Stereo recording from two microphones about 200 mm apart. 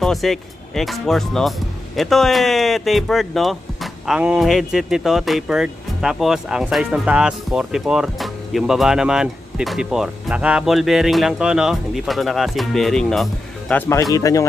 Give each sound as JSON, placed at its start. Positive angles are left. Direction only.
{"t": 0.0, "sound": "speech", "side_deg": 0}